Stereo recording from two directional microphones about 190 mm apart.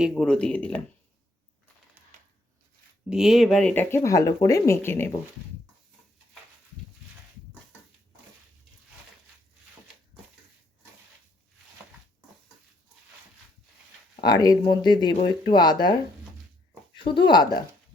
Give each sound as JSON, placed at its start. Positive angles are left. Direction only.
{"t": 0.0, "sound": "speech", "side_deg": 0}
{"t": 3.1, "sound": "speech", "side_deg": -5}
{"t": 14.3, "sound": "speech", "side_deg": 20}